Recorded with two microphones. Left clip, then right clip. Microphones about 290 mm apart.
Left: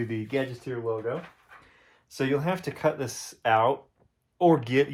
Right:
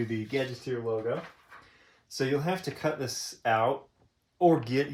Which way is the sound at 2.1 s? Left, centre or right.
Centre.